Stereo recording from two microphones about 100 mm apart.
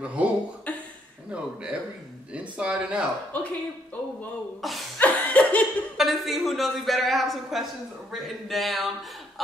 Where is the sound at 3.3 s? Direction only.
15° left (ahead or behind).